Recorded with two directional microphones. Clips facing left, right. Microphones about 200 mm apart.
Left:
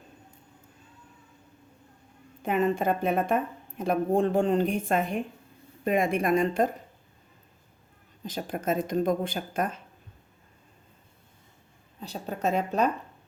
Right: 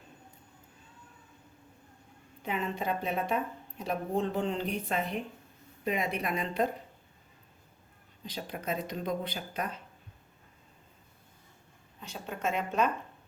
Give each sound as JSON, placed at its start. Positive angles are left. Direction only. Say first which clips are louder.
{"t": 2.4, "sound": "a woman's voice", "louder": "left 8 dB", "side_deg": 50}
{"t": 8.2, "sound": "a woman's voice", "louder": "left 6 dB", "side_deg": 50}
{"t": 11.9, "sound": "speech", "louder": "left 5 dB", "side_deg": 35}